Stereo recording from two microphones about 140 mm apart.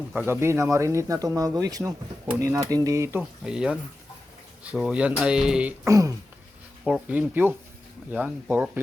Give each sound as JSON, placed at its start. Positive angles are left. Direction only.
{"t": 0.3, "sound": "speech", "side_deg": -20}
{"t": 3.2, "sound": "speech", "side_deg": -5}
{"t": 5.8, "sound": "speech", "side_deg": -25}
{"t": 6.8, "sound": "speech", "side_deg": -5}